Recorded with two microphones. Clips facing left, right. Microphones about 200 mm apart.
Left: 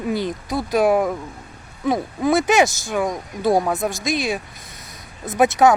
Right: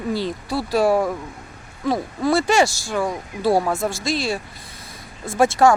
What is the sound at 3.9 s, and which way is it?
Speech, 20° left (ahead or behind).